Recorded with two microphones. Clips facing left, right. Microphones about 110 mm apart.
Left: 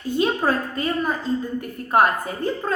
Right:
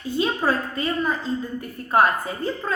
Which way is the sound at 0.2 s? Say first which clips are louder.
Left 1 dB; 45° left (ahead or behind).